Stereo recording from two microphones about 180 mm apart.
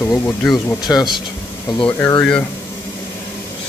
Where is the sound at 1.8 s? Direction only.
10° left (ahead or behind).